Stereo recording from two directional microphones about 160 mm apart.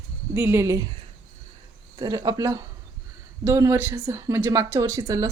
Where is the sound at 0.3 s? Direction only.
15° right (ahead or behind).